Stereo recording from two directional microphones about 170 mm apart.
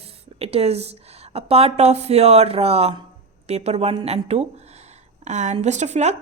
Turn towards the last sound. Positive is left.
turn(degrees=-40)  # may be behind; listen again after turning